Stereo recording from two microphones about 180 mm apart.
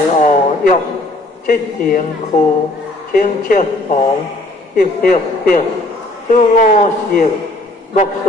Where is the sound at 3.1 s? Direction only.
50° left (ahead or behind).